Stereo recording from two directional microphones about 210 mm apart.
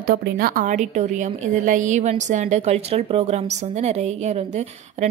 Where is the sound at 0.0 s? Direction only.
45° right (ahead or behind).